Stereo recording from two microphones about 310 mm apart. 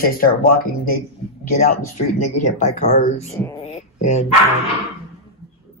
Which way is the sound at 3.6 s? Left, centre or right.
Left.